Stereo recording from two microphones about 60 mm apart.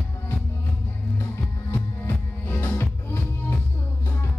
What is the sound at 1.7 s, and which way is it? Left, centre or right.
Music, left.